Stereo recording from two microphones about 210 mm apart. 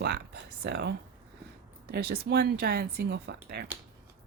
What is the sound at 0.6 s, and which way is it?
Speech, 50° right (ahead or behind).